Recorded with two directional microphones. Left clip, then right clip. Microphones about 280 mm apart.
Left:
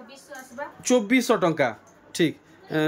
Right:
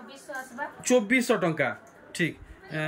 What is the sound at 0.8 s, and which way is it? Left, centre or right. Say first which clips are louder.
Speech: left 2 dB; centre.